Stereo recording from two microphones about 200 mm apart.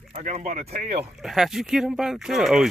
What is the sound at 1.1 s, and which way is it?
Speech, centre (ahead or behind).